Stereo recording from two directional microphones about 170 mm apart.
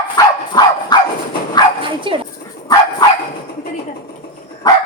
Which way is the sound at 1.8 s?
30° right (ahead or behind).